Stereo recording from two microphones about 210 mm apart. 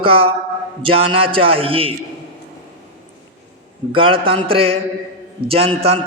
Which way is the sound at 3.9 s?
25° right (ahead or behind).